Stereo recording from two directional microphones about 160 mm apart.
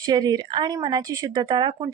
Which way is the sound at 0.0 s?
25° right (ahead or behind).